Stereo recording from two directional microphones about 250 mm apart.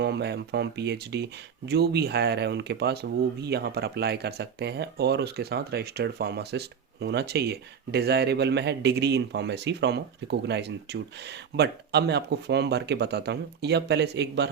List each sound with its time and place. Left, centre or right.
0.0 s speech: right